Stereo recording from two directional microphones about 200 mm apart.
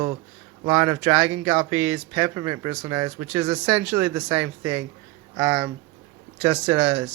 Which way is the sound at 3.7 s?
5° right (ahead or behind).